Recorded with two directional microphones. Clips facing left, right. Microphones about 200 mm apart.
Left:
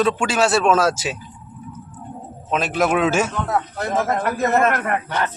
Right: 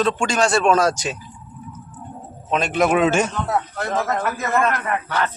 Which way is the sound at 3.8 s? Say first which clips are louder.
Left 1 dB; 20° left (ahead or behind).